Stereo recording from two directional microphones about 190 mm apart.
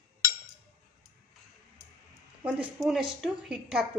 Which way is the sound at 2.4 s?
5° right (ahead or behind).